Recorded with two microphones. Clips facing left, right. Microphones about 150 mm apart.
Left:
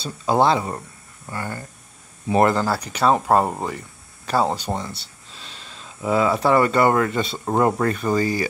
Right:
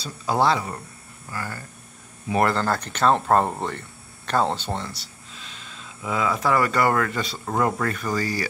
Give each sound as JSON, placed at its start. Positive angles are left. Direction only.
{"t": 0.0, "sound": "speech", "side_deg": 25}
{"t": 2.5, "sound": "speech", "side_deg": 10}
{"t": 5.3, "sound": "speech", "side_deg": 30}